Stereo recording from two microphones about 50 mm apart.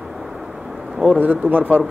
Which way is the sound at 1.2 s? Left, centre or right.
Right.